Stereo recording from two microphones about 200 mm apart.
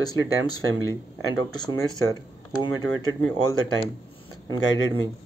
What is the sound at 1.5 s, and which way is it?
Speech, 20° left (ahead or behind).